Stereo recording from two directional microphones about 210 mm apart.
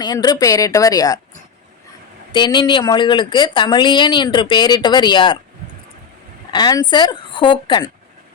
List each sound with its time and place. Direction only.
0.0 s a woman's voice: 20° left (ahead or behind)
2.3 s speech: 20° left (ahead or behind)
6.5 s speech: 20° left (ahead or behind)